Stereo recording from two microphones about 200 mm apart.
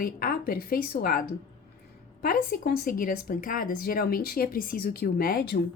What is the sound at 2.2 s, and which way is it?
Speech, 45° left (ahead or behind).